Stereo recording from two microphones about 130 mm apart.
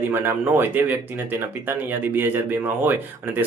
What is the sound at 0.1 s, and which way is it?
Speech, 15° right (ahead or behind).